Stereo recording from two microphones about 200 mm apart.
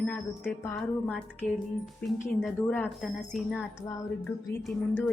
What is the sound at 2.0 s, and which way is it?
A woman's voice, 5° left (ahead or behind).